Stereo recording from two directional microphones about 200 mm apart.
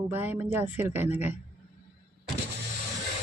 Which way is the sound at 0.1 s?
10° right (ahead or behind).